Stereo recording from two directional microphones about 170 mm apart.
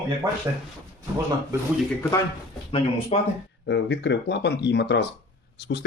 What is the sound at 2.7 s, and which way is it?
Speech, 35° left (ahead or behind).